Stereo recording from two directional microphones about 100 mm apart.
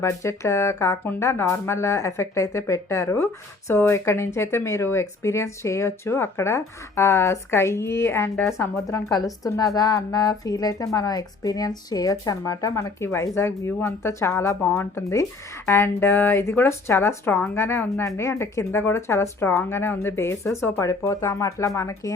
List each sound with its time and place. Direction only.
0.0 s a woman's voice: 30° left (ahead or behind)